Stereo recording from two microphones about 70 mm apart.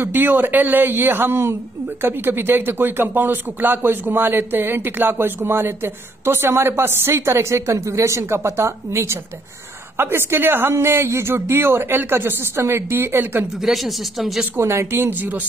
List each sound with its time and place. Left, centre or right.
0.0 s a woman's voice: right
13.7 s speech: centre
14.6 s a woman's voice: right